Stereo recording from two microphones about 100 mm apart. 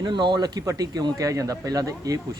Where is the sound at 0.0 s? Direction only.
50° right (ahead or behind).